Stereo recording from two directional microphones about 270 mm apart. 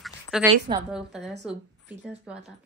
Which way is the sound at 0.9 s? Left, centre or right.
Centre.